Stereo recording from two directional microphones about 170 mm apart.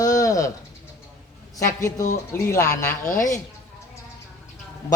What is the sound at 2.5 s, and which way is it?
Speech, 15° left (ahead or behind).